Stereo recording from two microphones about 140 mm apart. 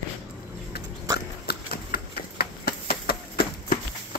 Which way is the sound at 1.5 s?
90° left.